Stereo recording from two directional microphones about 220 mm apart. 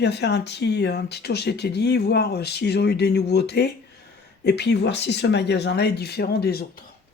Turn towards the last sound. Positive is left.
turn(degrees=45)  # may be behind; listen again after turning